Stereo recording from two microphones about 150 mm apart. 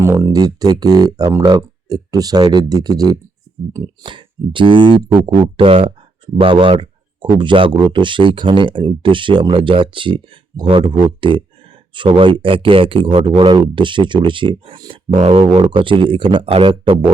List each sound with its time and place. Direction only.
0.0 s speech: 20° right (ahead or behind)
15.2 s speech: 45° right (ahead or behind)